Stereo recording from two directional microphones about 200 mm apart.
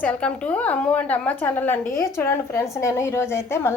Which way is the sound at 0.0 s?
5° left (ahead or behind).